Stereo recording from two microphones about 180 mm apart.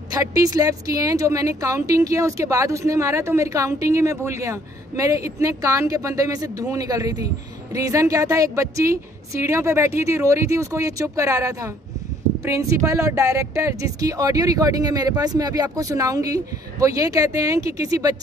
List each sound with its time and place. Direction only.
0.1 s speech: 20° right (ahead or behind)